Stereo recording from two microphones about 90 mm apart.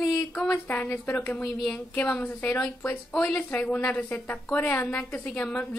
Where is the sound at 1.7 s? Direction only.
15° left (ahead or behind).